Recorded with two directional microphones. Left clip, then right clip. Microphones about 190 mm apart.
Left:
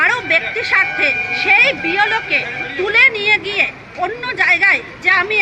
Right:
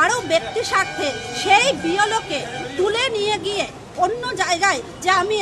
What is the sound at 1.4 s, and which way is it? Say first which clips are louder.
A woman's voice: left 3 dB; 25° right (ahead or behind).